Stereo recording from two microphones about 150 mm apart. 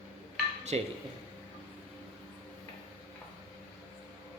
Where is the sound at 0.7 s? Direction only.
40° right (ahead or behind).